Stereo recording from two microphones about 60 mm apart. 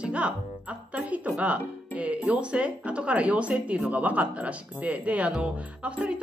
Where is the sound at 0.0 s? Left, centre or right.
Centre.